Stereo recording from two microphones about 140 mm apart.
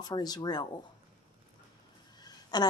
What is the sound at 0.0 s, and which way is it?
Speech, 30° left (ahead or behind).